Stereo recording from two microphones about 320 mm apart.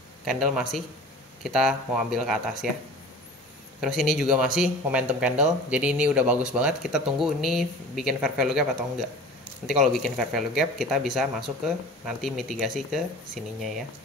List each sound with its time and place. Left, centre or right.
0.2 s speech: centre
3.8 s speech: centre